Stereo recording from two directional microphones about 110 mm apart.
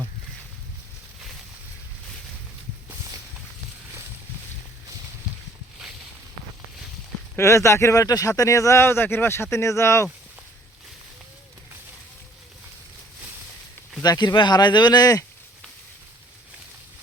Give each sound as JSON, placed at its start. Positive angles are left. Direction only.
{"t": 7.3, "sound": "speech", "side_deg": 25}
{"t": 14.0, "sound": "speech", "side_deg": 40}